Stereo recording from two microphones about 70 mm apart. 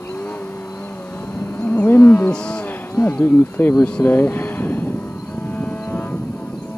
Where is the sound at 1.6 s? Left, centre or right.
Left.